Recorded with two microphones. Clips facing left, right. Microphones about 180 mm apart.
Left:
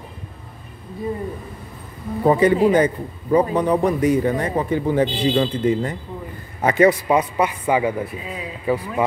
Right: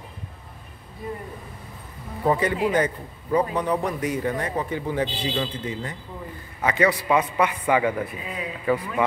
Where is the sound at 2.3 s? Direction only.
25° left (ahead or behind).